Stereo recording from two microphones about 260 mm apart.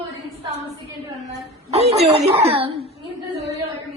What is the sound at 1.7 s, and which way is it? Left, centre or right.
Chuckle, right.